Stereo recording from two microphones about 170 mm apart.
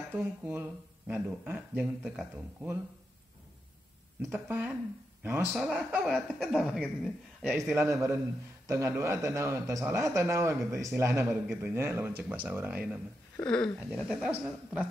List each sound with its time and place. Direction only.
0.1 s speech: 10° right (ahead or behind)
4.2 s speech: 10° right (ahead or behind)
7.7 s speech: 15° right (ahead or behind)
13.4 s speech: 5° left (ahead or behind)